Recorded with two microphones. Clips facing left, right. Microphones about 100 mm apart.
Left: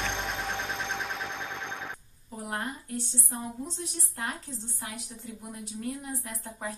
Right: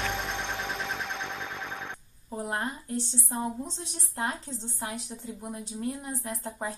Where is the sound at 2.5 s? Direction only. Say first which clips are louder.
Right 1 dB; 30° right (ahead or behind).